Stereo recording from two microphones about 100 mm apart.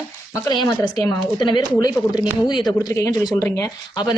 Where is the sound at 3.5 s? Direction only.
25° left (ahead or behind).